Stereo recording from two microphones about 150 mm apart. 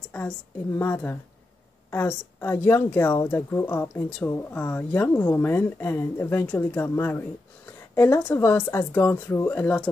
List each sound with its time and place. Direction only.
0.7 s speech: 15° left (ahead or behind)